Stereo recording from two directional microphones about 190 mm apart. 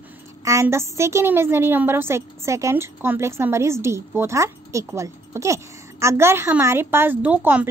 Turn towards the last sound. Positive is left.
turn(degrees=-10)  # may be behind; listen again after turning